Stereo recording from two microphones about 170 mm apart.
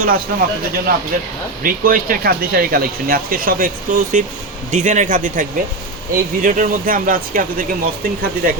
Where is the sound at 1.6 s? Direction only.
55° right (ahead or behind).